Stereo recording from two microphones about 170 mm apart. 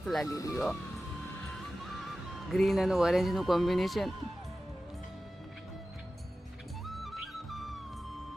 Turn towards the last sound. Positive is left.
turn(degrees=0)  # may be behind; listen again after turning